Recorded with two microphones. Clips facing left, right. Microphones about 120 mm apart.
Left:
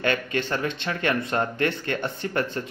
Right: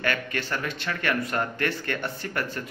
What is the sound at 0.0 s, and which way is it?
A man's voice, 20° left (ahead or behind).